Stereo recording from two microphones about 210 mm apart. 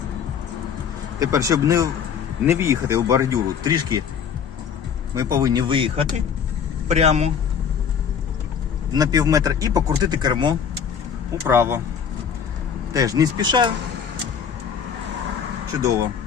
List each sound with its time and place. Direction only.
1.2 s speech: 15° right (ahead or behind)
5.1 s speech: 15° right (ahead or behind)
8.9 s speech: 15° right (ahead or behind)
11.4 s speech: 10° right (ahead or behind)
12.9 s speech: 15° right (ahead or behind)